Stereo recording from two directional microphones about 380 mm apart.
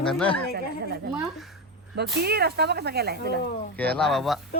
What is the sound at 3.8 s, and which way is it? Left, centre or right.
Speech, centre.